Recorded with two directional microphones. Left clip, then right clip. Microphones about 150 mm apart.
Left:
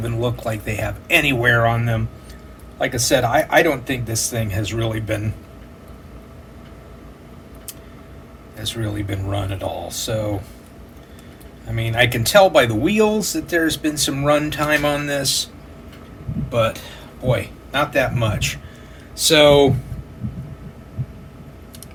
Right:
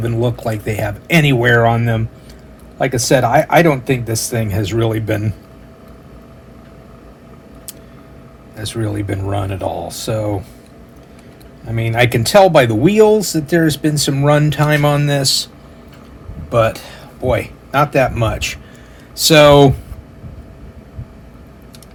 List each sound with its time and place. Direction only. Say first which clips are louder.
0.0 s speech: right 5 dB; 45° right (ahead or behind)
8.5 s speech: right 4 dB; 55° right (ahead or behind)
11.7 s speech: right 3 dB; 50° right (ahead or behind)
16.5 s speech: right 5 dB; 70° right (ahead or behind)